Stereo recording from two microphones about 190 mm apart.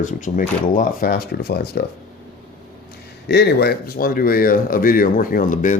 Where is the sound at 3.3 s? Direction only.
60° left (ahead or behind).